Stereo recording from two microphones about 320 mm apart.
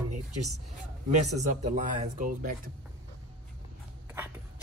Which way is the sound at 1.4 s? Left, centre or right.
Right.